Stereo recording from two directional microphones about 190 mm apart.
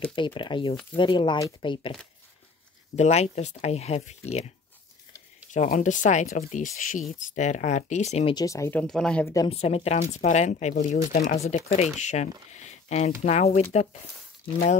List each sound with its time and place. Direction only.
0.0 s speech: 25° left (ahead or behind)
3.0 s speech: 35° left (ahead or behind)
5.5 s speech: 40° left (ahead or behind)
8.4 s speech: 15° left (ahead or behind)
8.8 s speech: 5° left (ahead or behind)
9.5 s speech: 30° left (ahead or behind)